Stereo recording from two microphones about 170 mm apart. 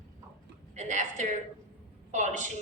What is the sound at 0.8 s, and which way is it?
A woman's voice, 45° right (ahead or behind).